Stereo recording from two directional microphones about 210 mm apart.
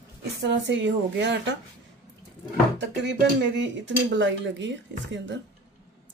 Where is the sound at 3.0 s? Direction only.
60° right (ahead or behind).